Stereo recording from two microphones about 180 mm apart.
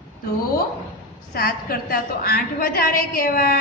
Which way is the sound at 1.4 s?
55° left (ahead or behind).